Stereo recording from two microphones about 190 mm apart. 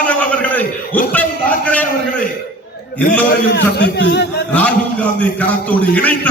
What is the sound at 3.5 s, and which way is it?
Speech, 65° left (ahead or behind).